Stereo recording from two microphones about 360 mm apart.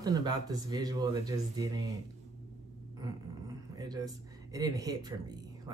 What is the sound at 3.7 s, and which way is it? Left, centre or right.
Speech, centre.